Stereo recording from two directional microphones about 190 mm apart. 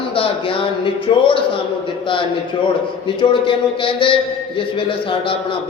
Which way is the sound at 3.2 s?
25° left (ahead or behind).